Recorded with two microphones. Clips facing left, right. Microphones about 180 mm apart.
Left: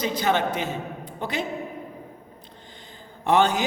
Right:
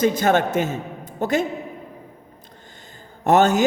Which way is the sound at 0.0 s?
50° right (ahead or behind).